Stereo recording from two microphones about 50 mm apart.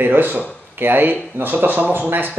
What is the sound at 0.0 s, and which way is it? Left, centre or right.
Speech, right.